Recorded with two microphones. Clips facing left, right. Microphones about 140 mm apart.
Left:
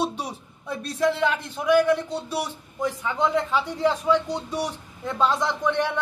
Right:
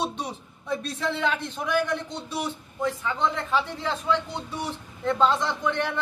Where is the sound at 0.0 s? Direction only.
10° left (ahead or behind).